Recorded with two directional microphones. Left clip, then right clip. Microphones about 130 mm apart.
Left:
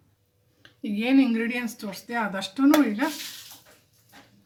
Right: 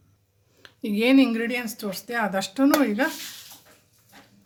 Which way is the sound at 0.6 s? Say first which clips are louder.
Right 6 dB; 80° right.